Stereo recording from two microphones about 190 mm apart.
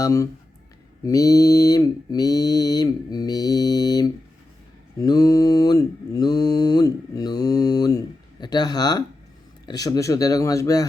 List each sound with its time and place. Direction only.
0.0 s speech: 15° left (ahead or behind)
1.0 s mantra: 20° left (ahead or behind)
9.6 s speech: 20° left (ahead or behind)